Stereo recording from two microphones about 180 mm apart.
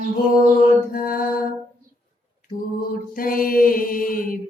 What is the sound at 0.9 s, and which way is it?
Mantra, 50° left (ahead or behind).